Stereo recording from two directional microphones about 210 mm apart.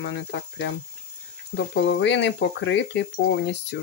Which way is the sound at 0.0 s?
60° left (ahead or behind).